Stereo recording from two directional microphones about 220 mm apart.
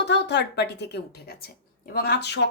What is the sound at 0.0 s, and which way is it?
A woman's voice, 50° left (ahead or behind).